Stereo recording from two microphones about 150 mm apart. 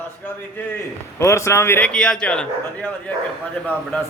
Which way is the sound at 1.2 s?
20° left (ahead or behind).